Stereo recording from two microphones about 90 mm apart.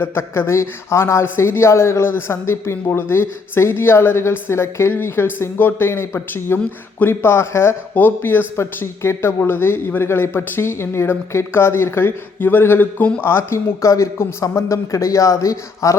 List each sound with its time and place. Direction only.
0.0 s speech: 25° left (ahead or behind)
13.2 s a man's voice: 30° left (ahead or behind)